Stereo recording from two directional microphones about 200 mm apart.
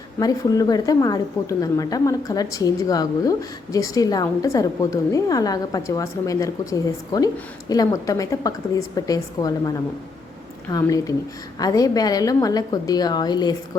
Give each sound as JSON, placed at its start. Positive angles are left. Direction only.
{"t": 0.2, "sound": "a woman's voice", "side_deg": 20}